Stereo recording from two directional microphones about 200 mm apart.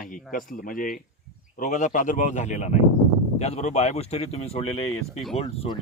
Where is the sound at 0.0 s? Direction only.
40° left (ahead or behind).